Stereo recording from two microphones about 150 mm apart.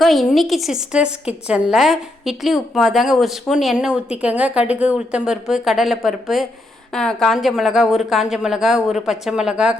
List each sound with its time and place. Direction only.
0.0 s a woman's voice: centre (ahead or behind)